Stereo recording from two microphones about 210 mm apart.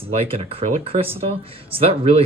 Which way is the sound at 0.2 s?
25° right (ahead or behind).